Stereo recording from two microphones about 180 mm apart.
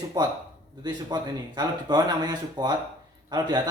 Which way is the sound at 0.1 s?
25° right (ahead or behind).